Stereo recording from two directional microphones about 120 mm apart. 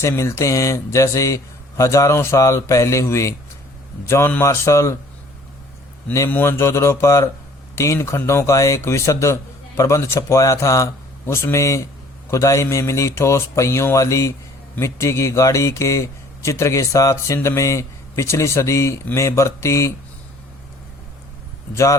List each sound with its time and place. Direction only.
0.0 s speech: 25° left (ahead or behind)
6.1 s speech: 20° left (ahead or behind)